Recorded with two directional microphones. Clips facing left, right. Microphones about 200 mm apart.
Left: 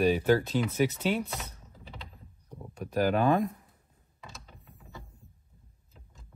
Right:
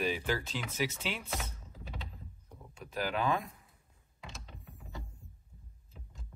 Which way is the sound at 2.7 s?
45° left (ahead or behind).